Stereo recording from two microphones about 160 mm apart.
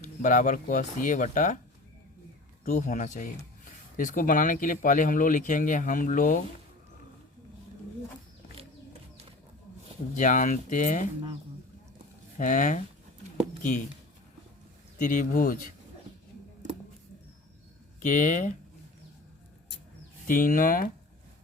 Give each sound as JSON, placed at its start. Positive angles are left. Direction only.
{"t": 0.0, "sound": "speech", "side_deg": 50}
{"t": 2.6, "sound": "speech", "side_deg": 50}
{"t": 10.2, "sound": "speech", "side_deg": 55}
{"t": 12.4, "sound": "speech", "side_deg": 50}
{"t": 14.9, "sound": "speech", "side_deg": 55}
{"t": 18.0, "sound": "speech", "side_deg": 50}
{"t": 20.2, "sound": "speech", "side_deg": 60}